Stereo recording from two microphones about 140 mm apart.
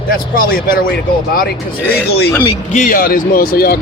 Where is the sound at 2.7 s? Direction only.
75° left (ahead or behind).